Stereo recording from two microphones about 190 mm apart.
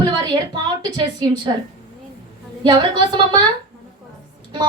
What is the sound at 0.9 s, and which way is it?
Speech, 25° right (ahead or behind).